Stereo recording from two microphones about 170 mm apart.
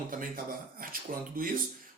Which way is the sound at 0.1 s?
55° right (ahead or behind).